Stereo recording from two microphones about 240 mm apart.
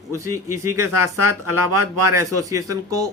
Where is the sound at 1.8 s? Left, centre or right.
Centre.